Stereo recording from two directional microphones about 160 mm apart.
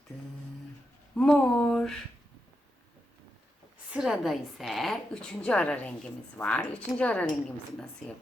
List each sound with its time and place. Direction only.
1.1 s speech: 5° left (ahead or behind)
3.9 s a woman's voice: centre (ahead or behind)